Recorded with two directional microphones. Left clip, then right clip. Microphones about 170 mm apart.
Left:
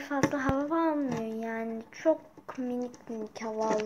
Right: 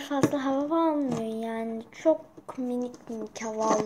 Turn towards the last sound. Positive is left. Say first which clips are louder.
# right 2 dB
turn(degrees=0)  # may be behind; listen again after turning